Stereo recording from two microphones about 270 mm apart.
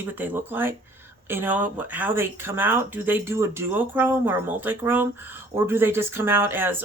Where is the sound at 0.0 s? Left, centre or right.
Centre.